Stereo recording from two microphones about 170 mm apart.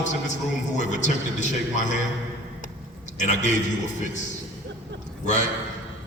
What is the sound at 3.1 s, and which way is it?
Speech, 45° left (ahead or behind).